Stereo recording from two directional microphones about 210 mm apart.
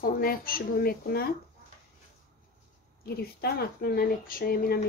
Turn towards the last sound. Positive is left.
turn(degrees=45)  # may be behind; listen again after turning